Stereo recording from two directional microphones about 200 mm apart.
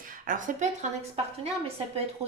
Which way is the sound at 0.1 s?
40° right (ahead or behind).